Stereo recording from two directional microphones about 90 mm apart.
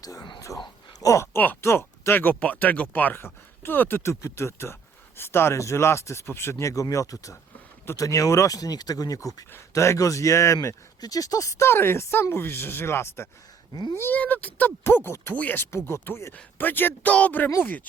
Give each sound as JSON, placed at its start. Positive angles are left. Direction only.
{"t": 0.0, "sound": "speech", "side_deg": 45}
{"t": 9.5, "sound": "speech", "side_deg": 30}
{"t": 14.2, "sound": "speech", "side_deg": 15}
{"t": 15.9, "sound": "speech", "side_deg": 30}